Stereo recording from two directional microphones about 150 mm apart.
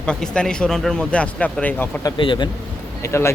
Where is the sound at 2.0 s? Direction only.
30° left (ahead or behind).